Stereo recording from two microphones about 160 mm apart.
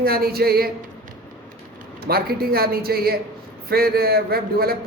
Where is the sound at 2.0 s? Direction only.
70° right (ahead or behind).